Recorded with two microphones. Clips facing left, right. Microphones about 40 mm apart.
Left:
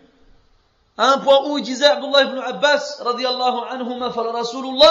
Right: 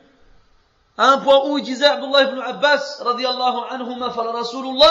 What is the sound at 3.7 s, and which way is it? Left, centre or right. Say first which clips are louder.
A man's voice: left 1 dB; centre.